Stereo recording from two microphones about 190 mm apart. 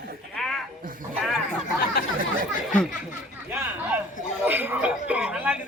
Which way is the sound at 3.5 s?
10° right (ahead or behind).